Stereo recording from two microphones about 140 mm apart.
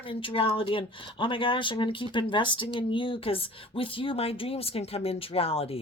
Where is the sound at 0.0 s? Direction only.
40° left (ahead or behind).